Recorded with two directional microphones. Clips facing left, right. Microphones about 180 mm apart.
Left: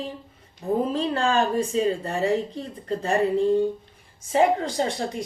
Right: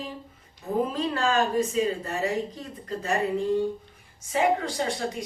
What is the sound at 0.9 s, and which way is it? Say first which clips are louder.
A woman's voice: left 2 dB; 30° left (ahead or behind).